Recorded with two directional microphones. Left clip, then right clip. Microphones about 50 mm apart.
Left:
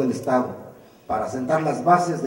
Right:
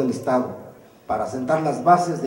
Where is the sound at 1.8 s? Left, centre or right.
Left.